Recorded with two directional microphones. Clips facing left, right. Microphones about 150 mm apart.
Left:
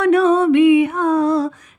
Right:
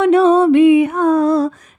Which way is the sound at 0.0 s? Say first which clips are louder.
Right 3 dB; 30° right (ahead or behind).